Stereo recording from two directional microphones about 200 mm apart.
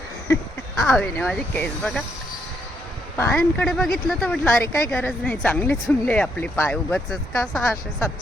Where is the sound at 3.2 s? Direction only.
10° left (ahead or behind).